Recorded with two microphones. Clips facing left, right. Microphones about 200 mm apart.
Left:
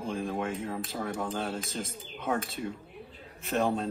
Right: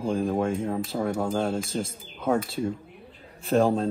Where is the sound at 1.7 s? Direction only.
30° right (ahead or behind).